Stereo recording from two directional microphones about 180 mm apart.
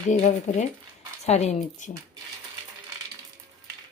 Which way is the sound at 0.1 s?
40° left (ahead or behind).